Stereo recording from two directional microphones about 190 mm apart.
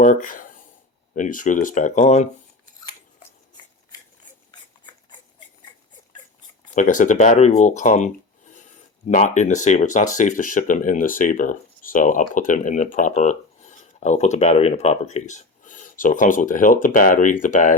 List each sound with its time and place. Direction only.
0.0 s speech: 45° left (ahead or behind)
6.7 s speech: 45° left (ahead or behind)